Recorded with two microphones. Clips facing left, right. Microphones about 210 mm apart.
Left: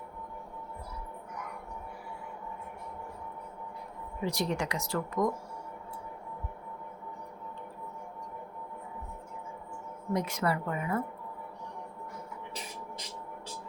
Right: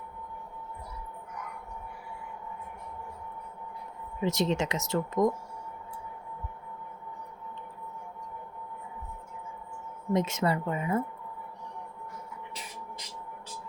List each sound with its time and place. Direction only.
4.2 s speech: 20° right (ahead or behind)
10.1 s speech: 25° right (ahead or behind)